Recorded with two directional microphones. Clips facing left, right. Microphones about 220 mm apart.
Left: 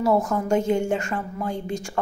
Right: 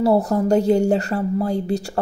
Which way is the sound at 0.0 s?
35° right (ahead or behind).